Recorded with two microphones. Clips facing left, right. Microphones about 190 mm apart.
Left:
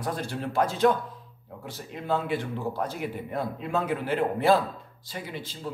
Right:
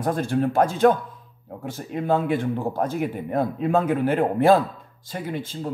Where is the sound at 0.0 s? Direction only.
50° right (ahead or behind).